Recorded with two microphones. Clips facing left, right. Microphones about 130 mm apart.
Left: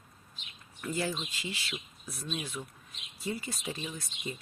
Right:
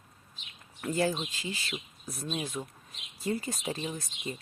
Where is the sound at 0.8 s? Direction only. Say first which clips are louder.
Right 4 dB; 35° right (ahead or behind).